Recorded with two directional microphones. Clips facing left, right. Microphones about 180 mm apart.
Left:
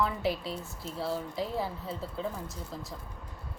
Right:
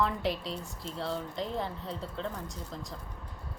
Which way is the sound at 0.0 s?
Centre (ahead or behind).